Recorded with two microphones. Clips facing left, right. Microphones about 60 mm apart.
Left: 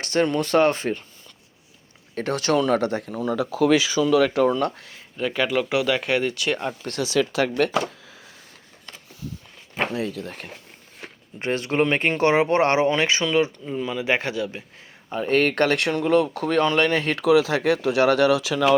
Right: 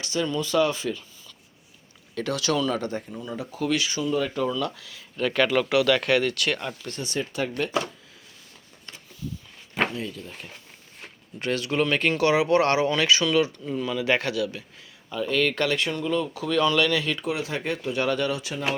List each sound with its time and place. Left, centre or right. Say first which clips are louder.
0.0 s speech: left 5 dB; left
2.1 s speech: left 4 dB; left
4.5 s speech: left 5 dB; left
5.1 s speech: right 1 dB; centre
6.8 s speech: left 11 dB; left
7.5 s speech: left 7 dB; left
9.9 s speech: left 6 dB; left
11.3 s speech: left 3 dB; left
15.1 s speech: left 4 dB; left
17.2 s speech: left 10 dB; left
17.8 s speech: left 7 dB; left